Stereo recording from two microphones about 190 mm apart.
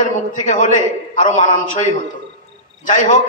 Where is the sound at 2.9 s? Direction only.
40° left (ahead or behind).